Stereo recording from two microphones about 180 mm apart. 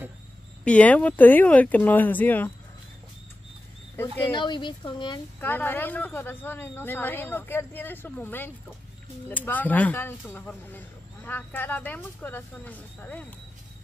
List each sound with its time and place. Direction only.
0.7 s speech: 5° left (ahead or behind)
3.9 s speech: 10° left (ahead or behind)
4.3 s speech: 25° left (ahead or behind)
5.4 s speech: 10° left (ahead or behind)